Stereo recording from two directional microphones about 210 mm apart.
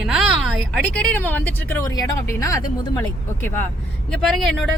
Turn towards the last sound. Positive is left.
turn(degrees=0)  # may be behind; listen again after turning